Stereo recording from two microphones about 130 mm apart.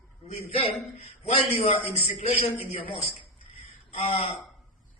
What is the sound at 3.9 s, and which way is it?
Speech, 50° left (ahead or behind).